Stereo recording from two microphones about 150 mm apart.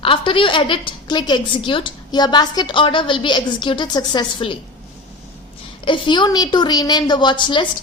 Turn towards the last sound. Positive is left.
turn(degrees=30)  # may be behind; listen again after turning